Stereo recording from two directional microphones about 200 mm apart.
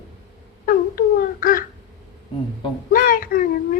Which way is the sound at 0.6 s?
45° left (ahead or behind).